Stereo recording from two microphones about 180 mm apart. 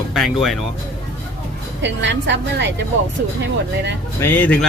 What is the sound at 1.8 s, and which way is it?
Speech, 85° right.